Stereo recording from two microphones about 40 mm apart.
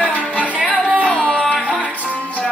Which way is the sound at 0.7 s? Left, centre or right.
Right.